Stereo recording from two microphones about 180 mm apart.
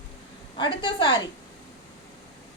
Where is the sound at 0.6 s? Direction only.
25° left (ahead or behind).